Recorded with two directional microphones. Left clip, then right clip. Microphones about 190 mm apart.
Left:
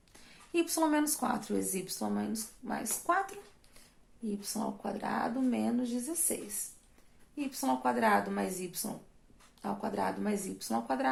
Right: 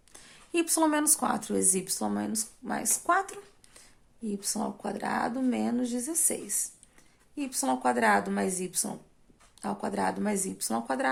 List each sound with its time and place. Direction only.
0.1 s speech: 45° right (ahead or behind)